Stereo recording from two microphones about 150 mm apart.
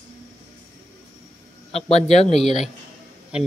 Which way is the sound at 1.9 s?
45° left (ahead or behind).